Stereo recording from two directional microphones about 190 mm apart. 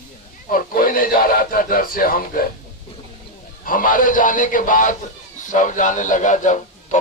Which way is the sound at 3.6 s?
45° left (ahead or behind).